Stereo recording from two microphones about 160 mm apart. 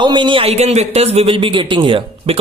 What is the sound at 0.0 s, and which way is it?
A man's voice, 30° right (ahead or behind).